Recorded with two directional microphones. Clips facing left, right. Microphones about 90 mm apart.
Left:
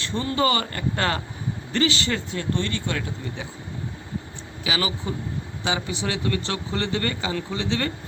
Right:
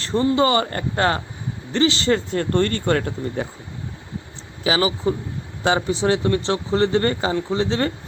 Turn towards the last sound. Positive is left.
turn(degrees=-35)  # may be behind; listen again after turning